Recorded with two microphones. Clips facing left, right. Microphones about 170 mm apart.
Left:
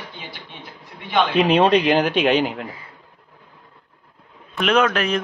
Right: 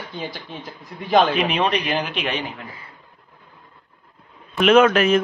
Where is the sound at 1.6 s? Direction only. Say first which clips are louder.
Left 6 dB; 45° left (ahead or behind).